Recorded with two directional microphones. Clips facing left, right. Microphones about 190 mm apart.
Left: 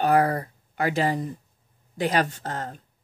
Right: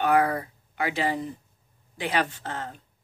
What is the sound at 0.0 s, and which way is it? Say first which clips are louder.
Speech: left 2 dB; 35° left (ahead or behind).